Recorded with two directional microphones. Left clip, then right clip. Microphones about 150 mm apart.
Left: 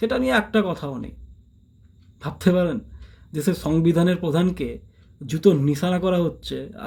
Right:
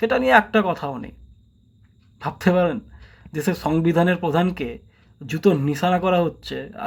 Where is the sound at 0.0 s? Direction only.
30° left (ahead or behind).